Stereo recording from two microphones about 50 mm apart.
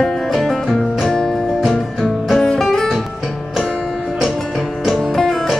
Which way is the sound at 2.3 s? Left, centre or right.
Centre.